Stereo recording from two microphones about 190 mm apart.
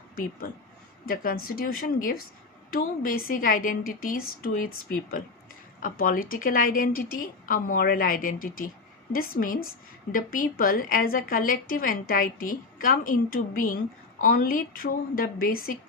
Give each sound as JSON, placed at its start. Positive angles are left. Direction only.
{"t": 1.0, "sound": "a woman's voice", "side_deg": 50}